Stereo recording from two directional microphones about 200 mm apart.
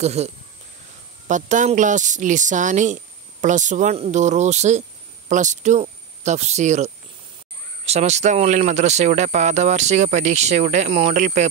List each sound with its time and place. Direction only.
0.0 s speech: 35° right (ahead or behind)